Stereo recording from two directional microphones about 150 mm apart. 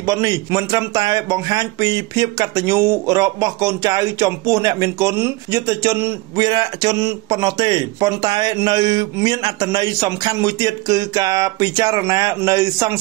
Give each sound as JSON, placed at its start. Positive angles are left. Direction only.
{"t": 0.0, "sound": "speech", "side_deg": -25}